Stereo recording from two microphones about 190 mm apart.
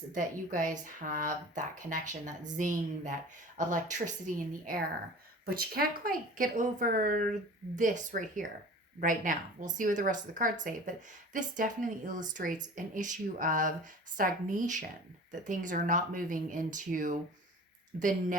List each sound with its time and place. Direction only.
0.1 s a woman's voice: 40° right (ahead or behind)